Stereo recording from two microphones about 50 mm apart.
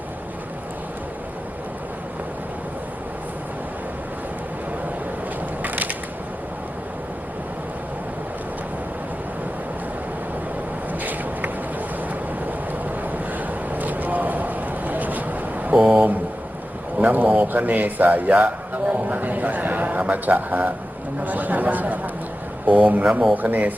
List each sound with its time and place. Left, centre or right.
5.6 s crushing: right
12.5 s vehicle: right
17.0 s a sound: right
22.6 s speech: right